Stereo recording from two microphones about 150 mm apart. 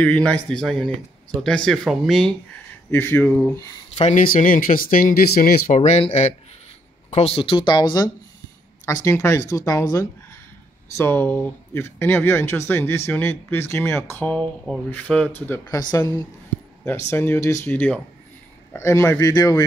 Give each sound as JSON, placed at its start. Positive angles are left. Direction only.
{"t": 0.0, "sound": "speech", "side_deg": 10}
{"t": 2.9, "sound": "speech", "side_deg": 15}
{"t": 4.3, "sound": "speech", "side_deg": 70}
{"t": 5.7, "sound": "speech", "side_deg": 45}